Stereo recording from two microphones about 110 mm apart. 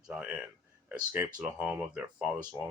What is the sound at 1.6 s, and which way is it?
Speech, 15° right (ahead or behind).